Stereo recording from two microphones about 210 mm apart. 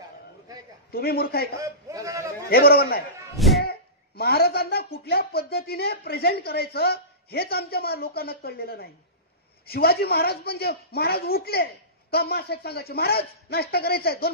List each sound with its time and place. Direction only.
0.9 s speech: 45° left (ahead or behind)
1.6 s speech: 15° right (ahead or behind)
2.5 s speech: 45° left (ahead or behind)
3.3 s a sound: centre (ahead or behind)
3.6 s speech: 50° left (ahead or behind)